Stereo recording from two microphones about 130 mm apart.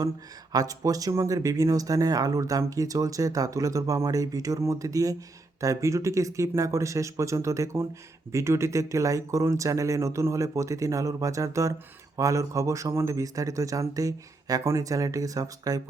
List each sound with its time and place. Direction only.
0.5 s speech: 30° right (ahead or behind)